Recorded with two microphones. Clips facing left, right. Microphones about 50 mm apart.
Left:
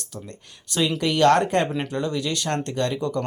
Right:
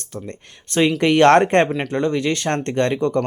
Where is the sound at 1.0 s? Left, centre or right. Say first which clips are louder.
Right 5 dB; right.